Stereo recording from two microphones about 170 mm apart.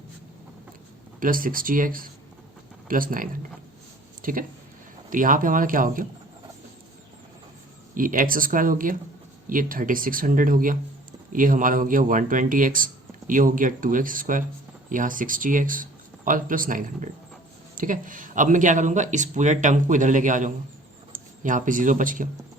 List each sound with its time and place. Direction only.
1.2 s speech: 55° right (ahead or behind)
7.9 s speech: 55° right (ahead or behind)